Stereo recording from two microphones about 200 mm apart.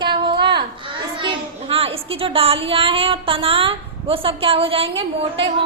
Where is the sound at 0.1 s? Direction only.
20° right (ahead or behind).